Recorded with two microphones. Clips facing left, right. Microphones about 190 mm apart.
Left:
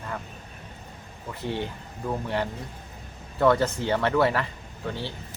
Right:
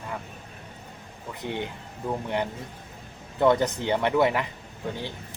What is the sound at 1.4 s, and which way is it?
Speech, 15° right (ahead or behind).